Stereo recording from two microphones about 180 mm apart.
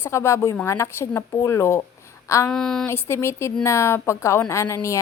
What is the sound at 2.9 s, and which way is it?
A woman's voice, 15° left (ahead or behind).